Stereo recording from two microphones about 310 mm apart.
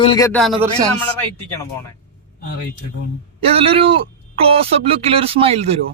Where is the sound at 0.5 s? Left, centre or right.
Centre.